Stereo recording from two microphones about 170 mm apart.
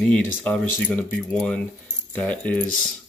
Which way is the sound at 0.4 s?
10° left (ahead or behind).